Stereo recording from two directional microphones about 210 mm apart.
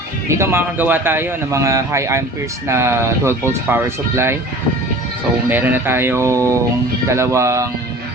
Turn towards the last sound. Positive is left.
turn(degrees=-15)  # may be behind; listen again after turning